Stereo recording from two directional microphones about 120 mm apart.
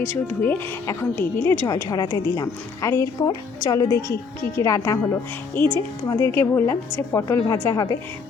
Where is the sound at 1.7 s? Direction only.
30° left (ahead or behind).